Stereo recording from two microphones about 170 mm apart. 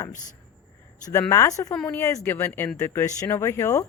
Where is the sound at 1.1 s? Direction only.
15° left (ahead or behind).